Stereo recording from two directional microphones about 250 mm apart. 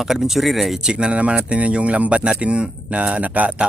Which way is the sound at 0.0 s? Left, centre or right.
Centre.